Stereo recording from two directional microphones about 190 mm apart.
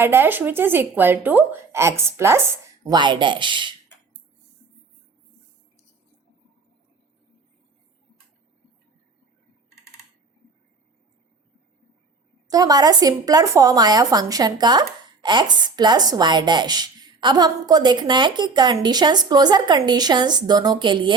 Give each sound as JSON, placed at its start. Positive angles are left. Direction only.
{"t": 0.0, "sound": "a woman's voice", "side_deg": -10}
{"t": 12.5, "sound": "speech", "side_deg": -20}